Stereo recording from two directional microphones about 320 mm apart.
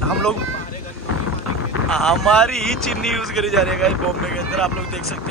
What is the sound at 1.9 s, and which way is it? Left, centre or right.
Speech, centre.